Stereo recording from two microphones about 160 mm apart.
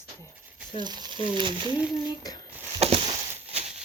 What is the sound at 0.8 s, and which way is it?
Speech, 25° right (ahead or behind).